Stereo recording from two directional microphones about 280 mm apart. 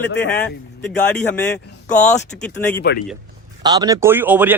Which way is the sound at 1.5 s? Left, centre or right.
Centre.